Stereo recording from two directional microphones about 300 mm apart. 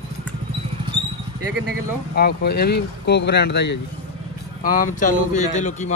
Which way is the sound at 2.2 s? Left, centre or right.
Left.